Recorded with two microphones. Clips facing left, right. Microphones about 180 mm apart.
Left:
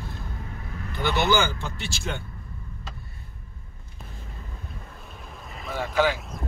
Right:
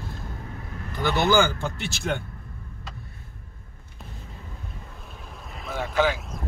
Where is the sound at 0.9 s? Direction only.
45° right (ahead or behind).